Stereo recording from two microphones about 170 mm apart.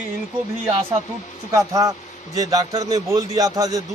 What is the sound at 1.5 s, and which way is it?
A man's voice, 20° right (ahead or behind).